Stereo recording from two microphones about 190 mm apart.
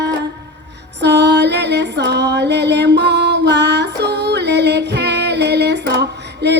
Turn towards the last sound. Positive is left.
turn(degrees=-60)  # may be behind; listen again after turning